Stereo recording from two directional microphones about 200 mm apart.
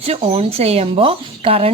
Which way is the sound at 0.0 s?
30° right (ahead or behind).